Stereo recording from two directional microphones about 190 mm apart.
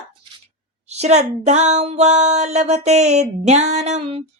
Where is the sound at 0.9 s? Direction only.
35° right (ahead or behind).